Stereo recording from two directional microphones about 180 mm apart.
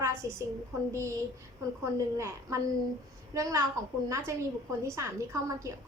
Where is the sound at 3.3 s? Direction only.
20° right (ahead or behind).